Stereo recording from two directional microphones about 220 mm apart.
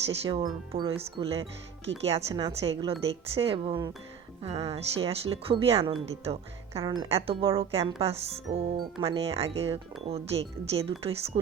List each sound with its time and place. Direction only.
0.1 s speech: 25° right (ahead or behind)